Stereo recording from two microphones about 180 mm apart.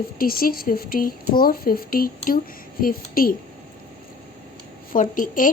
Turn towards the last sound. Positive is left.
turn(degrees=50)  # may be behind; listen again after turning